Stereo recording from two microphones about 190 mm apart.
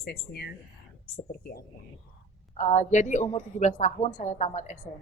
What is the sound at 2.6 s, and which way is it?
A woman's voice, 40° left (ahead or behind).